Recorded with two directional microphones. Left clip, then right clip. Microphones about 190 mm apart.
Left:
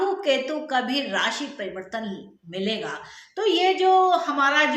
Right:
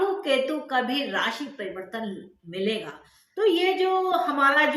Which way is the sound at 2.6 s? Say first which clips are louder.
Left 1 dB; 15° left (ahead or behind).